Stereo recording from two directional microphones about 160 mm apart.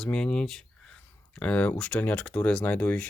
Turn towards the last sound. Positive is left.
turn(degrees=10)  # may be behind; listen again after turning